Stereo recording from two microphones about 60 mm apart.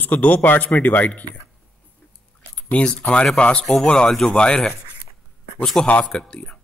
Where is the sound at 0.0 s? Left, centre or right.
Left.